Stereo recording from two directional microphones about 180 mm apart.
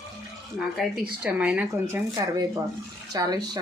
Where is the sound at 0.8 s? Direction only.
Centre (ahead or behind).